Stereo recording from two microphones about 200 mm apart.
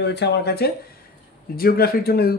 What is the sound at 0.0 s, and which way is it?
Speech, 55° left (ahead or behind).